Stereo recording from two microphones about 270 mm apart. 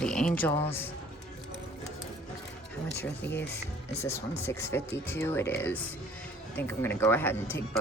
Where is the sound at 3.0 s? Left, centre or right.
Centre.